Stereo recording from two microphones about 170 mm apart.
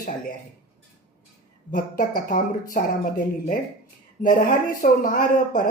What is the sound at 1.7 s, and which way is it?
Speech, 50° left (ahead or behind).